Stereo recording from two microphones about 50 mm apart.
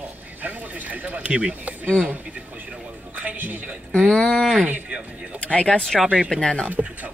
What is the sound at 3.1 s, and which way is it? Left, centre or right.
Music, right.